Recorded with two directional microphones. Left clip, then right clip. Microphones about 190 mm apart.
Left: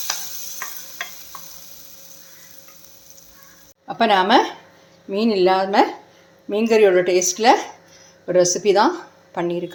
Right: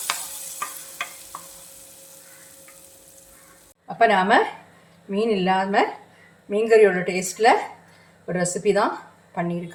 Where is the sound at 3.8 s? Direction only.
45° left (ahead or behind).